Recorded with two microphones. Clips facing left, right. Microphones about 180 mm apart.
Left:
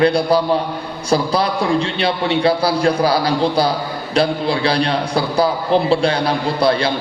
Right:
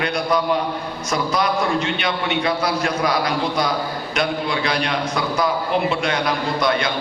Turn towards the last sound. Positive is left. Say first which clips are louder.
# left 4 dB
turn(degrees=30)  # may be behind; listen again after turning